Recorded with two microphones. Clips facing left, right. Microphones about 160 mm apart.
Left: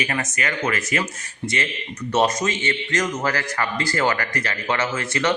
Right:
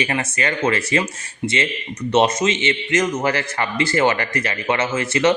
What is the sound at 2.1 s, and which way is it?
A man's voice, 20° right (ahead or behind).